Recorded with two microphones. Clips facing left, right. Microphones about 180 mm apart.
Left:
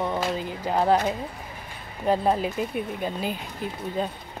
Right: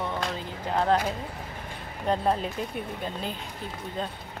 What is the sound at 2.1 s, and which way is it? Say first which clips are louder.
Speech: left 3 dB; 5° left (ahead or behind).